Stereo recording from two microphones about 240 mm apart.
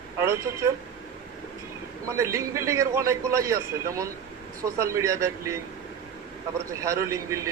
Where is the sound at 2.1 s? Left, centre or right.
Centre.